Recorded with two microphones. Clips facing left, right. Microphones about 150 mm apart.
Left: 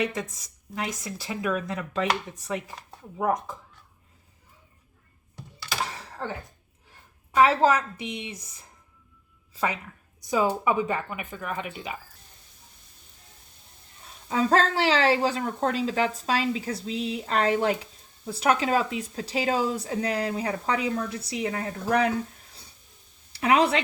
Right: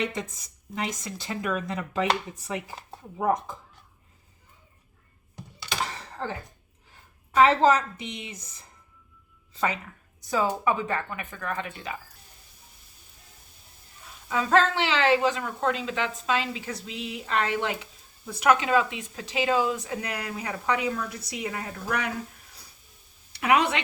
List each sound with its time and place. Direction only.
0.1 s speech: centre (ahead or behind)
5.6 s computer keyboard: 5° left (ahead or behind)
7.3 s speech: 5° left (ahead or behind)
10.2 s a sound: 15° left (ahead or behind)
10.6 s speech: 15° left (ahead or behind)
14.3 s a woman's voice: 35° left (ahead or behind)
23.4 s a woman's voice: 30° left (ahead or behind)